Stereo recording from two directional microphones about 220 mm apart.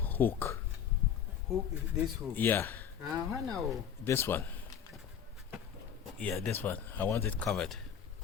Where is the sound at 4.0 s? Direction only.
10° left (ahead or behind).